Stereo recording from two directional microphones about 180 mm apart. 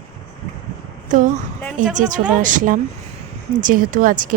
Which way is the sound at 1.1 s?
45° right (ahead or behind).